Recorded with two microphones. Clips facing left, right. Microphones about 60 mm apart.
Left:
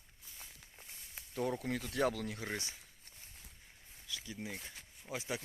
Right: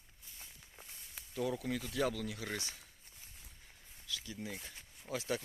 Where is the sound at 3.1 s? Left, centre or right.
Left.